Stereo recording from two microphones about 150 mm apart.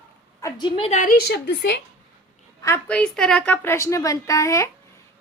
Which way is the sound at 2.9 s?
5° left (ahead or behind).